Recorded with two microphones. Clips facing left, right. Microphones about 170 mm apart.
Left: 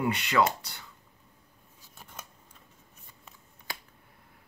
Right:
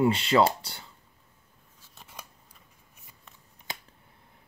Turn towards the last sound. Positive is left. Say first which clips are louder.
# right 1 dB
turn(degrees=-20)  # may be behind; listen again after turning